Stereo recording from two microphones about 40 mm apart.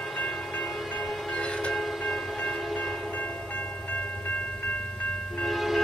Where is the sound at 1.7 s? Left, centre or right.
Centre.